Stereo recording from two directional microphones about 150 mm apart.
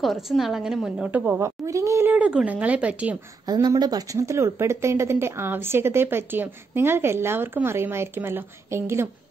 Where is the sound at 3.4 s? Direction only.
25° right (ahead or behind).